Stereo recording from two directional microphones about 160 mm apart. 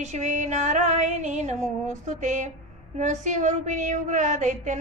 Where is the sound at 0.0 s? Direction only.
45° right (ahead or behind).